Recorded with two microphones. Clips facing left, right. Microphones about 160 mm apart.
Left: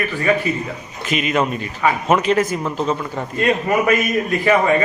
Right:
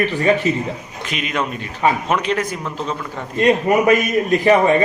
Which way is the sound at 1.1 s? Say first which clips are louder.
Left 4 dB; 5° left (ahead or behind).